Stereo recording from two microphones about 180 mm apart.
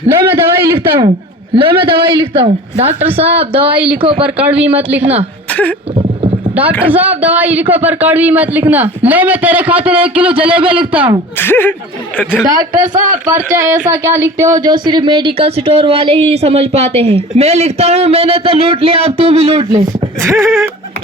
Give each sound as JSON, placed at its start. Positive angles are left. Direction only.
{"t": 0.2, "sound": "a sound", "side_deg": -15}
{"t": 0.9, "sound": "a man's voice", "side_deg": -30}
{"t": 3.7, "sound": "speech", "side_deg": -10}
{"t": 6.0, "sound": "rowboat", "side_deg": -30}
{"t": 6.8, "sound": "speech", "side_deg": -10}
{"t": 10.6, "sound": "a man's voice", "side_deg": -30}
{"t": 11.3, "sound": "speech", "side_deg": 10}
{"t": 13.0, "sound": "speech", "side_deg": -45}
{"t": 13.9, "sound": "speech", "side_deg": -15}
{"t": 20.2, "sound": "speech", "side_deg": -15}